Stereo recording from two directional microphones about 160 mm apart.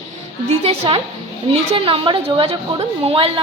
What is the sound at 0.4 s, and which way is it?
A woman's voice, 40° right (ahead or behind).